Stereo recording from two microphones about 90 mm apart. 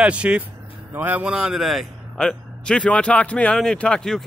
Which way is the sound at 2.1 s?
10° left (ahead or behind).